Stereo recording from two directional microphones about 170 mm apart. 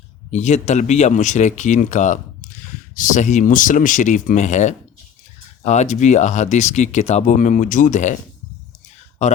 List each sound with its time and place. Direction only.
0.3 s speech: 45° left (ahead or behind)